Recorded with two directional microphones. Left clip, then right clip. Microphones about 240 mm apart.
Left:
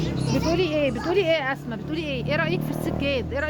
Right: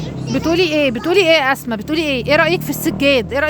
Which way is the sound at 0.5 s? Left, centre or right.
Right.